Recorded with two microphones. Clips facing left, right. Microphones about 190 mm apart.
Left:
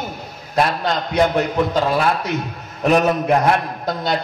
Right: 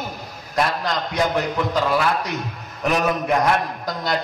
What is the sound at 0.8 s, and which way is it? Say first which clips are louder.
A man's voice: left 4 dB; 25° left (ahead or behind).